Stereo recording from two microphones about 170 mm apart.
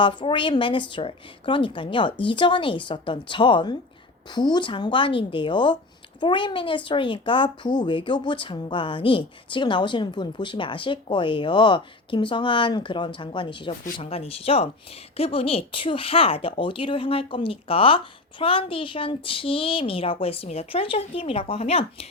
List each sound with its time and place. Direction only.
0.0 s speech: 30° left (ahead or behind)